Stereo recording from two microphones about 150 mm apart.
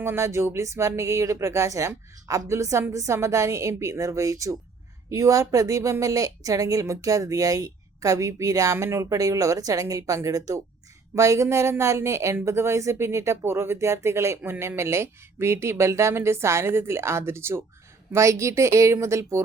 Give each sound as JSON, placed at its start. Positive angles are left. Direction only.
{"t": 0.0, "sound": "speech", "side_deg": -15}